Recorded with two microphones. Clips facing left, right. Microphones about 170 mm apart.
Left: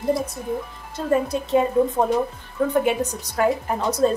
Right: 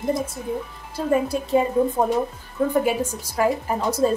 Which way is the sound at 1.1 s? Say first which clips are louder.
Even; 5° right (ahead or behind).